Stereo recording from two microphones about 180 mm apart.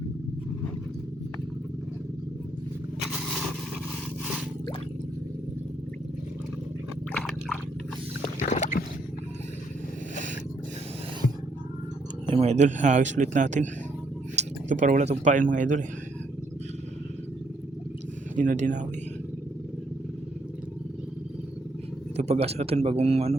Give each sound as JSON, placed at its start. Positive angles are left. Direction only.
{"t": 8.4, "sound": "boat", "side_deg": 45}
{"t": 12.3, "sound": "speech", "side_deg": -35}
{"t": 18.3, "sound": "speech", "side_deg": -45}
{"t": 22.1, "sound": "speech", "side_deg": -35}